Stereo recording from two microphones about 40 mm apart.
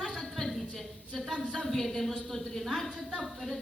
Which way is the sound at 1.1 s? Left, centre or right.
Centre.